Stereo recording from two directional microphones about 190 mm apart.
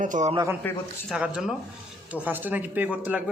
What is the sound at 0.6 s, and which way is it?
Speech, 10° left (ahead or behind).